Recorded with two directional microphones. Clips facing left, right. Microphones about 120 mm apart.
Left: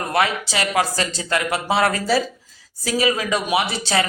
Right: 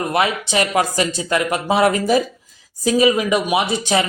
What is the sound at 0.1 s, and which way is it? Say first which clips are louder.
A man's voice: left 1 dB; 20° right (ahead or behind).